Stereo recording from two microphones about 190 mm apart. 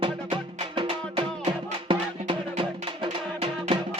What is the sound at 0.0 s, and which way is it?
Music, 25° right (ahead or behind).